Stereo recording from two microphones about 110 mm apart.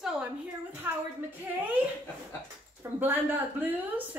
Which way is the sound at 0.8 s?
20° right (ahead or behind).